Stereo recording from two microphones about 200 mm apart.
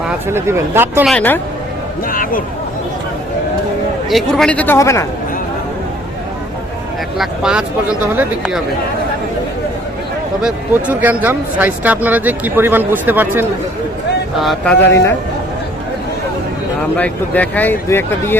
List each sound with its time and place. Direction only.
0.3 s speech: 10° right (ahead or behind)
1.0 s speech: 5° left (ahead or behind)
2.0 s speech: 45° left (ahead or behind)
4.1 s speech: 5° left (ahead or behind)
7.2 s speech: 5° right (ahead or behind)
10.4 s speech: 5° right (ahead or behind)
14.3 s speech: centre (ahead or behind)
17.0 s speech: 10° left (ahead or behind)